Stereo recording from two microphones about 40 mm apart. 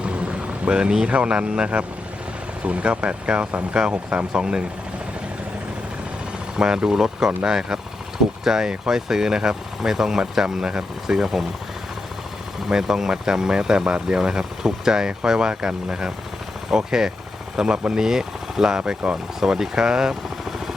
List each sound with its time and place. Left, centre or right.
0.0 s vehicle: right
1.1 s speech: right
6.6 s speech: centre
12.6 s speech: centre